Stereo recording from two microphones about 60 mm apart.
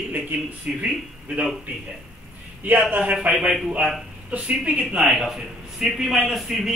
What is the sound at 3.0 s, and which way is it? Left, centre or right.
A man's voice, centre.